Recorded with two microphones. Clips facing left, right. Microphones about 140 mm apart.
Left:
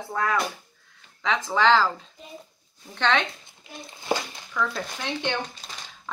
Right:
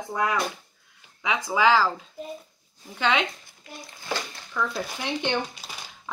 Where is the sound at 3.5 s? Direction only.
20° left (ahead or behind).